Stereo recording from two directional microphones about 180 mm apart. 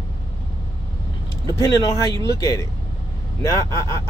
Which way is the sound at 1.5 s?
20° left (ahead or behind).